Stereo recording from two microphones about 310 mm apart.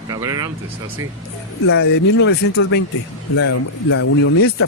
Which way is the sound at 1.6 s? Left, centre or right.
Left.